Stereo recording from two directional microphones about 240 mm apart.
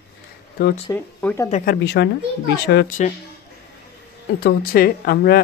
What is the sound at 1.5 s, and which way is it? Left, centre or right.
Speech, left.